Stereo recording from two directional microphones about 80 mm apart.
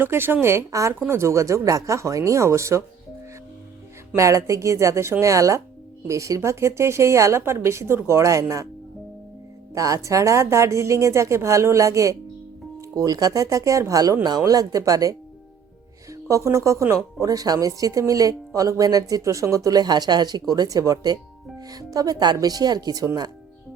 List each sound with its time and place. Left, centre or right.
0.0 s a woman's voice: right
4.1 s a woman's voice: right
9.7 s a woman's voice: right
20.5 s speech: right